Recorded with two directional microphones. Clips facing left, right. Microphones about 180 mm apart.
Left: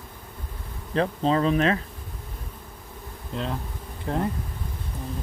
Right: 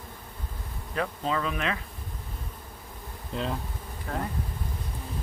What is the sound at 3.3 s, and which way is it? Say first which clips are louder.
Speech: left 1 dB; centre (ahead or behind).